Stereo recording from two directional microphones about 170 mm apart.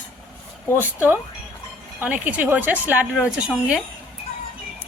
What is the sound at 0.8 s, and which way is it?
A woman's voice, 10° right (ahead or behind).